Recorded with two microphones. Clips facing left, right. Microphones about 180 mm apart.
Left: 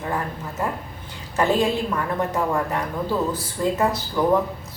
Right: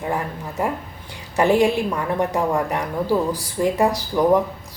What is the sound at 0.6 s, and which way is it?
A woman's voice, 15° right (ahead or behind).